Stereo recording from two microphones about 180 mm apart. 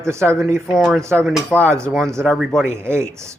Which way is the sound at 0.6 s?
Centre (ahead or behind).